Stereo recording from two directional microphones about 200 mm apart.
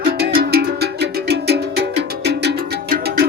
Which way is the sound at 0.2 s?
50° right (ahead or behind).